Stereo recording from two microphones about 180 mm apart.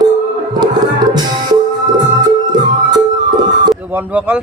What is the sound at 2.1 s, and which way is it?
Music, 25° right (ahead or behind).